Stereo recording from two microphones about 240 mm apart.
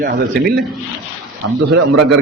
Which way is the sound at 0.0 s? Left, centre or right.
Right.